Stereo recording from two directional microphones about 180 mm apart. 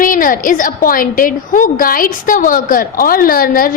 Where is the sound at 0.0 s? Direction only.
50° left (ahead or behind).